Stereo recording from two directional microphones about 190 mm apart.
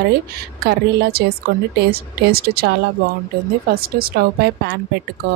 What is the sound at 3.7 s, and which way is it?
Speech, 50° right (ahead or behind).